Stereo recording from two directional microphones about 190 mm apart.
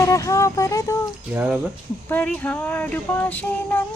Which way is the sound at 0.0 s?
15° left (ahead or behind).